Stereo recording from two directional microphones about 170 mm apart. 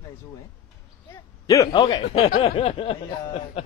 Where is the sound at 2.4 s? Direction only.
35° left (ahead or behind).